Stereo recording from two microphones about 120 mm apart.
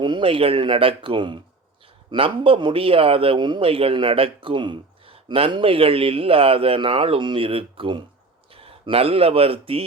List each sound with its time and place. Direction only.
0.0 s a man's voice: 45° right (ahead or behind)